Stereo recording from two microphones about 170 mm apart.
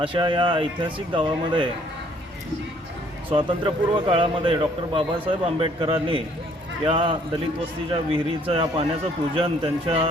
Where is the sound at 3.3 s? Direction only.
30° right (ahead or behind).